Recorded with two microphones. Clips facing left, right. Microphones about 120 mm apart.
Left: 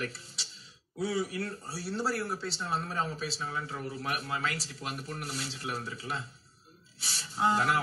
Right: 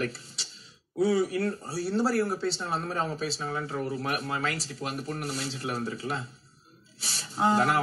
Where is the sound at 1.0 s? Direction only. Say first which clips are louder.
Right 7 dB; 55° right (ahead or behind).